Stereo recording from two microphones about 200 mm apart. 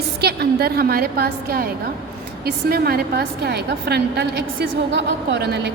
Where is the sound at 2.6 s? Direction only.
50° right (ahead or behind).